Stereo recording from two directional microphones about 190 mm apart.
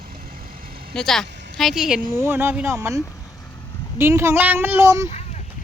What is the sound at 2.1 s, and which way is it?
Speech, 15° right (ahead or behind).